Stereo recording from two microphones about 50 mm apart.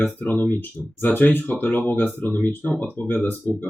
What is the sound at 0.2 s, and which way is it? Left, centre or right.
Speech, left.